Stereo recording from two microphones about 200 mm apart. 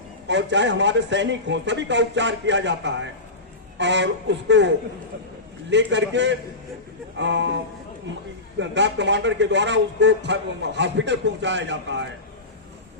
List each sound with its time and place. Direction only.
0.3 s a man's voice: 60° right (ahead or behind)
5.7 s a man's voice: 60° right (ahead or behind)
8.5 s a man's voice: 65° right (ahead or behind)